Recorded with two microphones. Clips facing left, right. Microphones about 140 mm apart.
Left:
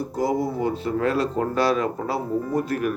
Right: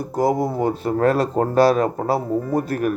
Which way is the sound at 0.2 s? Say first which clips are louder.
Right 4 dB; 45° right (ahead or behind).